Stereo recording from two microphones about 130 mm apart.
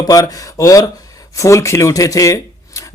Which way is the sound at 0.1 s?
25° left (ahead or behind).